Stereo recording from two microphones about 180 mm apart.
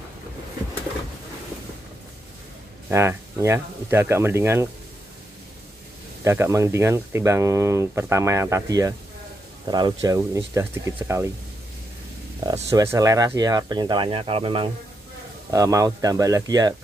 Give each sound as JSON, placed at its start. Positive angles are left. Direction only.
{"t": 2.9, "sound": "speech", "side_deg": -15}
{"t": 6.2, "sound": "speech", "side_deg": -15}
{"t": 12.6, "sound": "speech", "side_deg": -15}
{"t": 15.5, "sound": "speech", "side_deg": -20}